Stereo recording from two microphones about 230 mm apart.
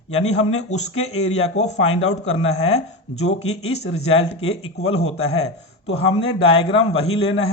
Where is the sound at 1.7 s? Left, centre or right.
Left.